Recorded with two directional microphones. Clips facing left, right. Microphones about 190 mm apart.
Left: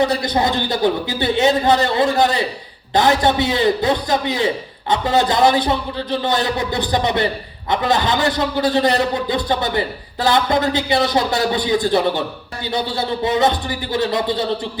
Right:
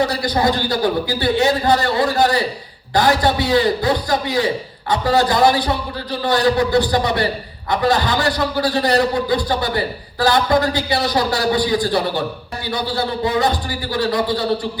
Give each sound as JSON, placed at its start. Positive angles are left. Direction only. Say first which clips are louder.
{"t": 0.0, "sound": "a man's voice", "louder": "even", "side_deg": 20}